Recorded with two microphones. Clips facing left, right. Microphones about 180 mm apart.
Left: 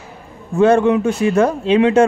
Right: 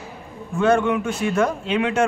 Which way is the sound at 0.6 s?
35° left (ahead or behind).